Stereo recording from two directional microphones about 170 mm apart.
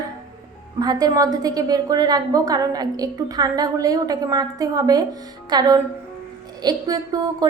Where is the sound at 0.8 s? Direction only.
20° right (ahead or behind).